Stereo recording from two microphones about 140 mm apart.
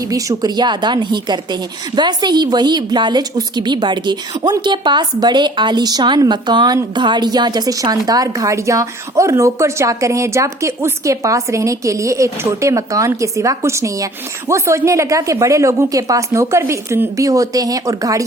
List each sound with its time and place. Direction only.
0.1 s a woman's voice: 25° right (ahead or behind)